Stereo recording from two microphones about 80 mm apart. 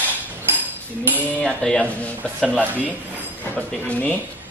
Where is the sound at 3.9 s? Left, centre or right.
Centre.